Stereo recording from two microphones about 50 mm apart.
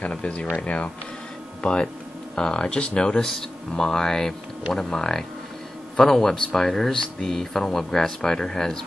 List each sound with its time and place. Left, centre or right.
0.0 s speech: left